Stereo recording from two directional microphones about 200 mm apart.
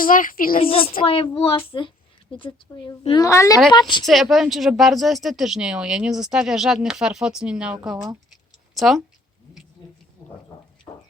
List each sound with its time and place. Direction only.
0.0 s a woman's voice: 45° left (ahead or behind)
0.6 s a woman's voice: 30° left (ahead or behind)
4.0 s speech: centre (ahead or behind)
10.9 s a sound: 20° left (ahead or behind)